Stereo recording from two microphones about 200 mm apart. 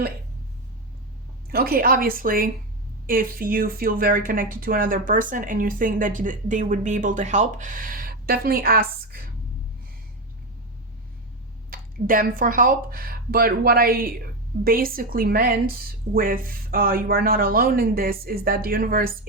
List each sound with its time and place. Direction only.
1.5 s speech: 50° right (ahead or behind)
11.7 s speech: 45° right (ahead or behind)